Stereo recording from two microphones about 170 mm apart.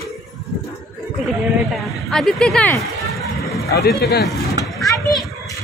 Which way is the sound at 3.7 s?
75° left (ahead or behind).